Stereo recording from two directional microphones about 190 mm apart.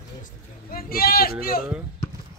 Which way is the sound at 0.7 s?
50° left (ahead or behind).